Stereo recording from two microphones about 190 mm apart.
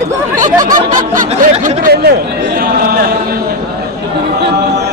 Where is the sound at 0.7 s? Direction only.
45° right (ahead or behind).